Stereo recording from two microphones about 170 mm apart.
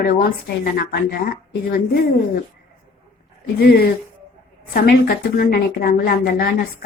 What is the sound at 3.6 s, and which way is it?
A woman's voice, 70° left (ahead or behind).